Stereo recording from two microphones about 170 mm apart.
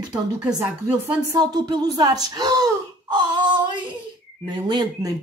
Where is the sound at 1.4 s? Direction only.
25° right (ahead or behind).